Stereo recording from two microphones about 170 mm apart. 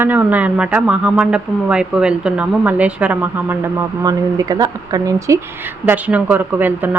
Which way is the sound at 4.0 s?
20° right (ahead or behind).